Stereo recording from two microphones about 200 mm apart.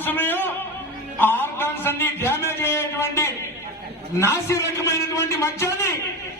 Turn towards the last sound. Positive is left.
turn(degrees=15)  # may be behind; listen again after turning